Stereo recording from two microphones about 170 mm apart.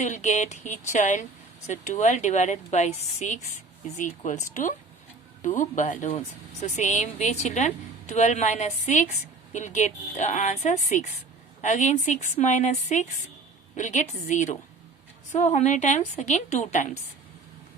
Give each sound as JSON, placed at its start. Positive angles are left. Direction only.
{"t": 0.0, "sound": "a woman's voice", "side_deg": 45}